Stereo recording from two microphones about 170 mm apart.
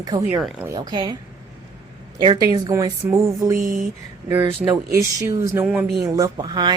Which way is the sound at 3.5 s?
55° right (ahead or behind).